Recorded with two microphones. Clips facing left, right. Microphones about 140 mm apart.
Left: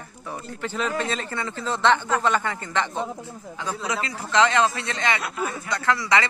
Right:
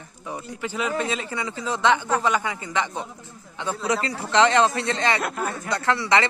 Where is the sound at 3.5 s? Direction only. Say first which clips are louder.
Right 3 dB; 30° right (ahead or behind).